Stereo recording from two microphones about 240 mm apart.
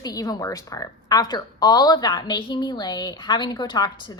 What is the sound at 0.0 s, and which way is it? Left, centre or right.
A woman's voice, centre.